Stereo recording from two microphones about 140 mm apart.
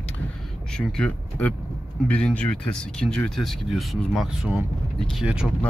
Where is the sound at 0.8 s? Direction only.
5° left (ahead or behind).